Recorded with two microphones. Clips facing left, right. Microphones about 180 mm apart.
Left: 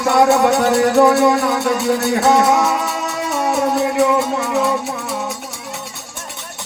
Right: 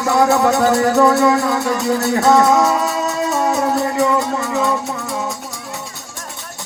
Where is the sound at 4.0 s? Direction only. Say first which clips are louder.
Left 1 dB; 65° left (ahead or behind).